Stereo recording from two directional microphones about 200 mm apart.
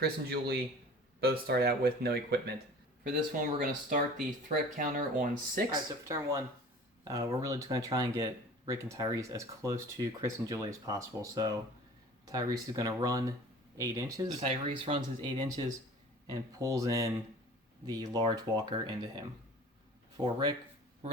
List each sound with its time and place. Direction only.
0.0 s speech: 55° right (ahead or behind)
3.6 s speech: 40° right (ahead or behind)
5.7 s speech: 15° right (ahead or behind)